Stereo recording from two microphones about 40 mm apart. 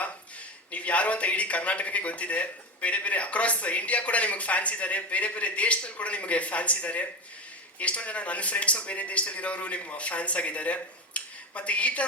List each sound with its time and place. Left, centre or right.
0.7 s a man's voice: left